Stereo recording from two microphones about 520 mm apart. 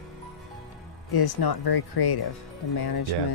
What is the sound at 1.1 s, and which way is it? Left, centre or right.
Speech, left.